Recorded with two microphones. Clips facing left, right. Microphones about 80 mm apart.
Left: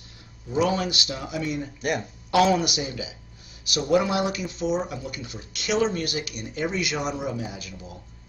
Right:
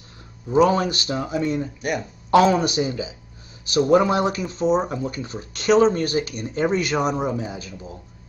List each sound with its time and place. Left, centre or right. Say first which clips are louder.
0.5 s speech: right 6 dB; right
1.8 s speech: right 1 dB; centre
2.3 s speech: right 4 dB; right